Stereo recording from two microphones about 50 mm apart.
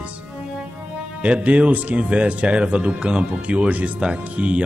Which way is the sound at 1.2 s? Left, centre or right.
Right.